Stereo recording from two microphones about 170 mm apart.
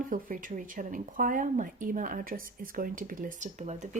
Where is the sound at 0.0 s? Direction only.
55° right (ahead or behind).